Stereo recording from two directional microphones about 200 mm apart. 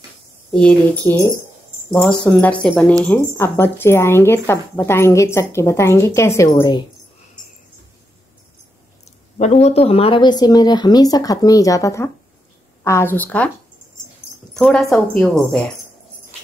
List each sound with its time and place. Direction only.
0.5 s a woman's voice: 5° left (ahead or behind)
2.0 s a woman's voice: 5° left (ahead or behind)
9.4 s a woman's voice: 35° left (ahead or behind); by 13.5 s 10° left (ahead or behind)
14.5 s a woman's voice: centre (ahead or behind)